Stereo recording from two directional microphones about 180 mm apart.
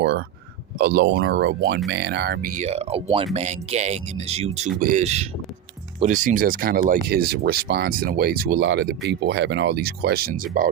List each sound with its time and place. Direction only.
0.8 s speech: 60° right (ahead or behind)